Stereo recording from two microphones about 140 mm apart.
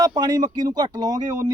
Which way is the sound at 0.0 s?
30° right (ahead or behind).